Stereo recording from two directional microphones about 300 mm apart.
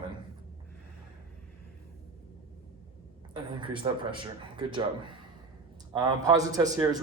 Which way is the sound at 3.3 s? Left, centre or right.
Centre.